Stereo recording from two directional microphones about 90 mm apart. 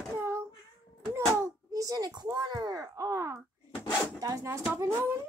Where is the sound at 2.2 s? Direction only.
50° right (ahead or behind).